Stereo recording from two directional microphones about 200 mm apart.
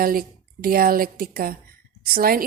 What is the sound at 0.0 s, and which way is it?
A woman's voice, 45° right (ahead or behind).